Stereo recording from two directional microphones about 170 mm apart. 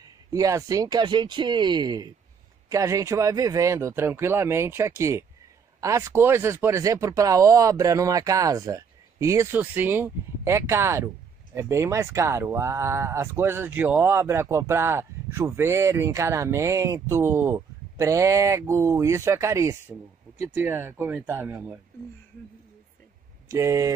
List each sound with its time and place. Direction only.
0.0 s speech: 20° right (ahead or behind)
23.5 s speech: 20° right (ahead or behind)